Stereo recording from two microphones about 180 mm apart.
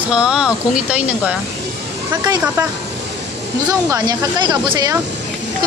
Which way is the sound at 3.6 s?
20° right (ahead or behind).